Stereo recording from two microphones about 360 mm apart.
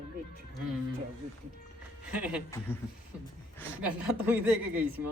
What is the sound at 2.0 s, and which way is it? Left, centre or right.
Speech, centre.